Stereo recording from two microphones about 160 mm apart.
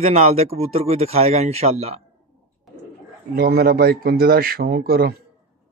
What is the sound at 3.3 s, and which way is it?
Speech, 75° right (ahead or behind).